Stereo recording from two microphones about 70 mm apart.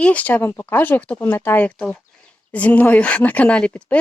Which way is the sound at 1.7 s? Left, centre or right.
Centre.